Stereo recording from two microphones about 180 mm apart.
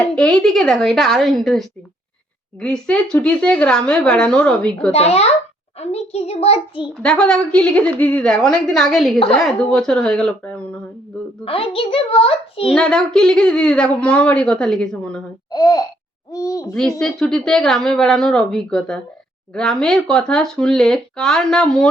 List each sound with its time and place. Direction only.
0.0 s a woman's voice: 5° left (ahead or behind)
4.9 s a child's voice: 35° left (ahead or behind)
6.9 s a woman's voice: 5° left (ahead or behind)
11.4 s a child's voice: 30° left (ahead or behind)
12.7 s a woman's voice: 5° left (ahead or behind)
15.5 s a child's voice: 20° left (ahead or behind)
17.0 s a woman's voice: 5° left (ahead or behind)